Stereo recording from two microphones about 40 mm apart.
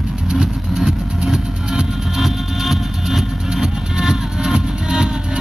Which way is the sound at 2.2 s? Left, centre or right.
Centre.